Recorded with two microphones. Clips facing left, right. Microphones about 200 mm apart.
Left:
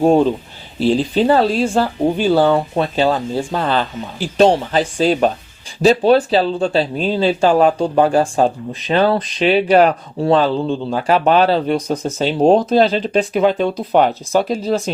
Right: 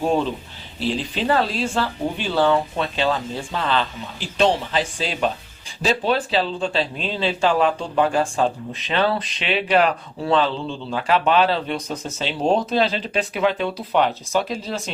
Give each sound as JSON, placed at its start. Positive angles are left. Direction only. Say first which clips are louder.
{"t": 0.0, "sound": "speech", "louder": "left 8 dB", "side_deg": 45}